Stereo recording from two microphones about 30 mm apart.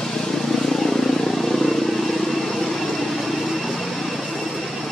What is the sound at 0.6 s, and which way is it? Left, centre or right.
Vehicle, centre.